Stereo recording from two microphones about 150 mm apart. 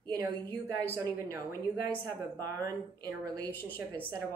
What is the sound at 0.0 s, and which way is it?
A woman's voice, 25° right (ahead or behind).